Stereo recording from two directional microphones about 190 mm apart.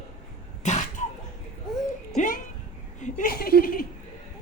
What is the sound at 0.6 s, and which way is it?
Cough, 40° left (ahead or behind).